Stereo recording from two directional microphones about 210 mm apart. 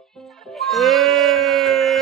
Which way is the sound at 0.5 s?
Centre (ahead or behind).